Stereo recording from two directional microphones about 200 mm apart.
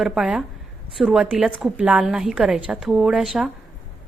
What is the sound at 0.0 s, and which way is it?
Speech, centre (ahead or behind).